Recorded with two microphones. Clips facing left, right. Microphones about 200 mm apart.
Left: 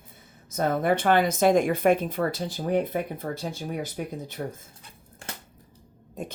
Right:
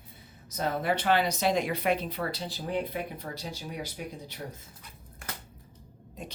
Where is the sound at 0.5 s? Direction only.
50° left (ahead or behind).